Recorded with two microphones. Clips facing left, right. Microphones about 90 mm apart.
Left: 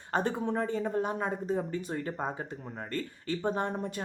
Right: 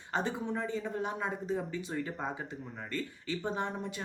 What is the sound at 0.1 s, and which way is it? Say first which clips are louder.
Speech: left 4 dB; 50° left (ahead or behind).